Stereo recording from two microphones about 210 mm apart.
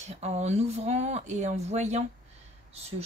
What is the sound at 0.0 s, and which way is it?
Speech, 30° right (ahead or behind).